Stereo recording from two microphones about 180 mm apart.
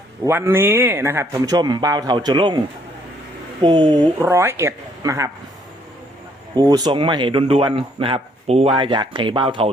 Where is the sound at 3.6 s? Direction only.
25° right (ahead or behind).